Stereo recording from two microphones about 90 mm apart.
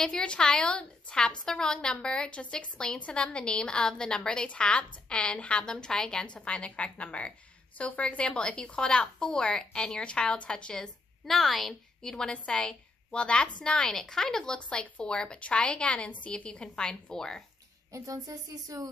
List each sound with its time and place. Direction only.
0.0 s a woman's voice: 10° left (ahead or behind)
17.9 s speech: 40° right (ahead or behind)